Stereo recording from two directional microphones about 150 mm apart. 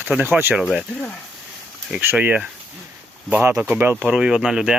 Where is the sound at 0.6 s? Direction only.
Centre (ahead or behind).